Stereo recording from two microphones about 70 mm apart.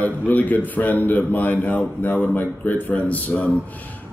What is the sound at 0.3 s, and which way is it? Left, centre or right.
A man's voice, left.